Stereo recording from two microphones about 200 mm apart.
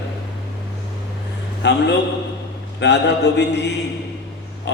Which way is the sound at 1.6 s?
60° left (ahead or behind).